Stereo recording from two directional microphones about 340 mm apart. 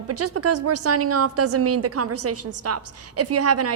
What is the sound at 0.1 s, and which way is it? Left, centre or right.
Speech, right.